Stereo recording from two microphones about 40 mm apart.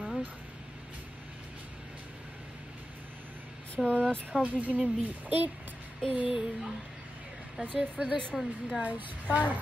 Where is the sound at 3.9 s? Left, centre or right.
Right.